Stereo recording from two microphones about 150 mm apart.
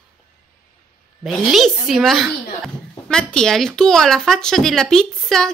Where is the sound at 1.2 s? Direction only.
Centre (ahead or behind).